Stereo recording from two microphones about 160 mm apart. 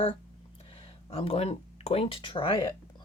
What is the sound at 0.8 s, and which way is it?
Speech, 35° left (ahead or behind).